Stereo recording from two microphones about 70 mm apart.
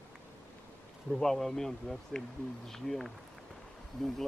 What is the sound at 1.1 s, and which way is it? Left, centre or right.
Speech, centre.